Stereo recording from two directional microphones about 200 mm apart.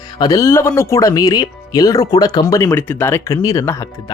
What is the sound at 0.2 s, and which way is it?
Speech, 15° left (ahead or behind).